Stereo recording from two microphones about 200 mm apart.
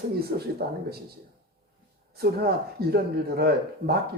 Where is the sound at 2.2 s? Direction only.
50° right (ahead or behind).